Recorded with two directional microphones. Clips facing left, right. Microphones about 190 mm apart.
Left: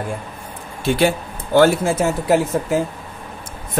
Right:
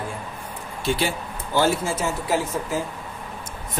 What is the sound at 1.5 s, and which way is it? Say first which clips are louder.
Speech: left 8 dB; 60° left (ahead or behind).